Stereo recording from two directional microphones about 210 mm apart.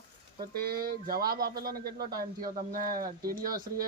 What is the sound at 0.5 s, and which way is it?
Speech, 45° right (ahead or behind).